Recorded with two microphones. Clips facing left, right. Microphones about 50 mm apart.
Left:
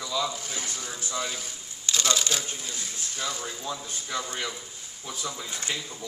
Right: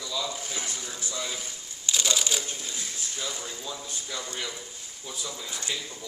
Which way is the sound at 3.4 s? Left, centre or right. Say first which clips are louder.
Left 3 dB; left.